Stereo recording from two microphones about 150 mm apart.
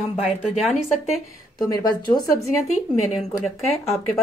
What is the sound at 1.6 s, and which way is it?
Speech, 25° left (ahead or behind).